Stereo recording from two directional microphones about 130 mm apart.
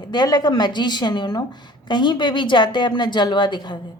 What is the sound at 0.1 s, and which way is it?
A woman's voice, 35° left (ahead or behind).